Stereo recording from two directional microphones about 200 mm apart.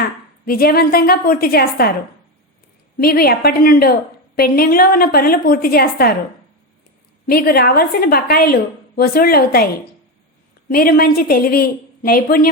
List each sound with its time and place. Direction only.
0.4 s a woman's voice: 50° left (ahead or behind)
3.0 s a woman's voice: 50° left (ahead or behind)
7.3 s a woman's voice: 50° left (ahead or behind)
10.7 s a woman's voice: 45° left (ahead or behind)